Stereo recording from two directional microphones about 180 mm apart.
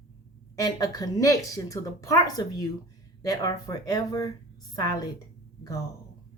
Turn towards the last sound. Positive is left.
turn(degrees=20)  # may be behind; listen again after turning